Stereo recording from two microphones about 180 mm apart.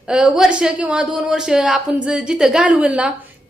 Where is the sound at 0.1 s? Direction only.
5° right (ahead or behind).